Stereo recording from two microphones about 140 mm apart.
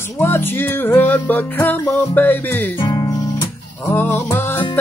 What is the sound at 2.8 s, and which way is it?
Music, 35° left (ahead or behind).